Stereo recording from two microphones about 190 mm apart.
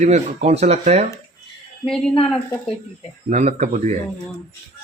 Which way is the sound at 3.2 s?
40° right (ahead or behind).